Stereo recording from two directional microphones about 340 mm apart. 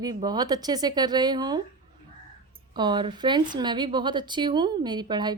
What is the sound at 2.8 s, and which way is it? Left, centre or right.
Speech, centre.